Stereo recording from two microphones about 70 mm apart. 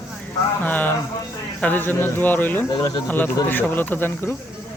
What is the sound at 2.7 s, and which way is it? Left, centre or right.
Speech, left.